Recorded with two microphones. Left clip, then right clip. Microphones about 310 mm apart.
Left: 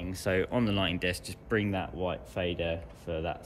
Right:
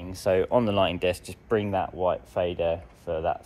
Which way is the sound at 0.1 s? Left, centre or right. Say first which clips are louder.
Right 7 dB; centre.